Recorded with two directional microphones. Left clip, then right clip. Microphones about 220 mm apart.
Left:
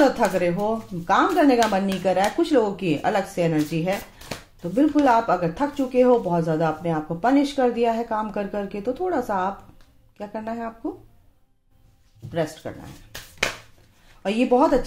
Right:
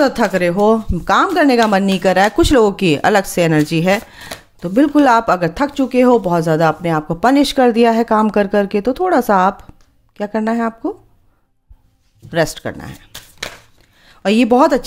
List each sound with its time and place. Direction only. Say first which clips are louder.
0.0 s speech: right 5 dB; 45° right (ahead or behind)
5.0 s speech: right 7 dB; 45° right (ahead or behind)
12.3 s speech: right 10 dB; 45° right (ahead or behind)
14.2 s speech: right 7 dB; 50° right (ahead or behind)